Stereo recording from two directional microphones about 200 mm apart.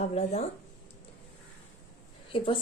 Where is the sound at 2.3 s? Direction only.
25° left (ahead or behind).